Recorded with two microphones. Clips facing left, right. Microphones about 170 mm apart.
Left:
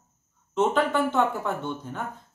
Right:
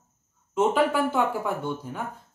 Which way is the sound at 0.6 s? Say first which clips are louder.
Right 1 dB; 10° right (ahead or behind).